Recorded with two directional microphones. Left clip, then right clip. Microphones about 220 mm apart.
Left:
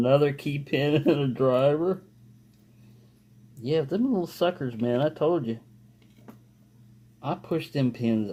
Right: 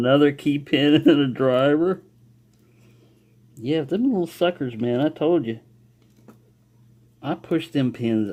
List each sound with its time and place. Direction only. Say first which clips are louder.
0.0 s speech: right 4 dB; 35° right (ahead or behind)
3.6 s speech: right 3 dB; 35° right (ahead or behind)
7.2 s speech: right 4 dB; 35° right (ahead or behind)